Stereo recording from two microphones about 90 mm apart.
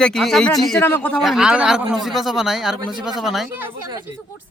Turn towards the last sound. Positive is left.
turn(degrees=-5)  # may be behind; listen again after turning